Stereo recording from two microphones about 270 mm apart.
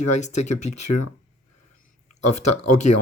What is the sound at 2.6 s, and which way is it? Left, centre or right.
Speech, left.